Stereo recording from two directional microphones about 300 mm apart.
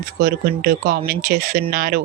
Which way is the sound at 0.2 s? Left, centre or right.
Right.